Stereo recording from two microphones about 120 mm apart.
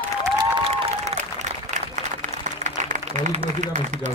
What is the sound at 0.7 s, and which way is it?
Applause, 65° right (ahead or behind).